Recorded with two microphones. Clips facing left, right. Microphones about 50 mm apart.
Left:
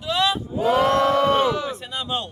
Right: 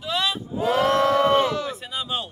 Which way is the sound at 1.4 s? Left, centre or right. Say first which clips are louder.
Left 1 dB; left.